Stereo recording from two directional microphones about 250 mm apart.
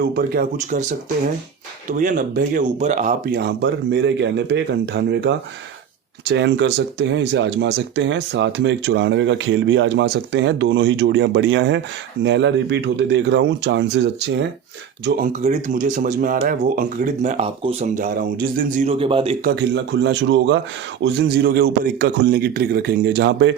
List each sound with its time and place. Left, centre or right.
0.0 s speech: right
15.0 s speech: right
19.5 s speech: right